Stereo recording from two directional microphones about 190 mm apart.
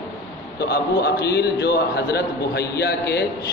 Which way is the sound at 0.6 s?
55° left (ahead or behind).